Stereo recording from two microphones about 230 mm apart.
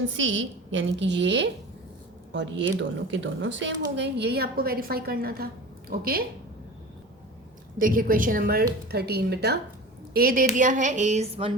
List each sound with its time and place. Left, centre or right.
0.1 s a woman's voice: right
7.8 s a woman's voice: right